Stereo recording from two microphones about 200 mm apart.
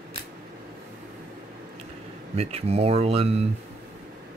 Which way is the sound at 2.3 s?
30° right (ahead or behind).